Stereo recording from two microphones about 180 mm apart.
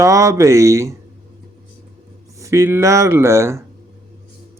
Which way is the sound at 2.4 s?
15° right (ahead or behind).